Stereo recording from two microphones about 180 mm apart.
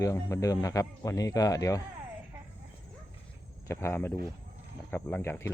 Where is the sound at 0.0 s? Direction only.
15° left (ahead or behind).